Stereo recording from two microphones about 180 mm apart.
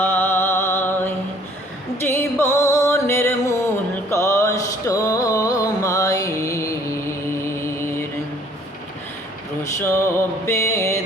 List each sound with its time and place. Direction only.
0.0 s music: 10° left (ahead or behind)
9.8 s music: 15° left (ahead or behind)